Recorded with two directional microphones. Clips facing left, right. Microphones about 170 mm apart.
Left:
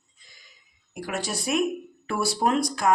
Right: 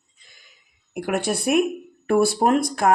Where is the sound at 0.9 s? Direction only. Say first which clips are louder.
Right 7 dB; 60° right (ahead or behind).